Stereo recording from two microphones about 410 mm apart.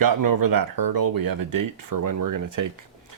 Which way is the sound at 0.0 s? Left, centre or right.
Right.